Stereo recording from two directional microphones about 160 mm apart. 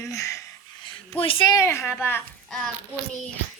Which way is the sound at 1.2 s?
35° left (ahead or behind).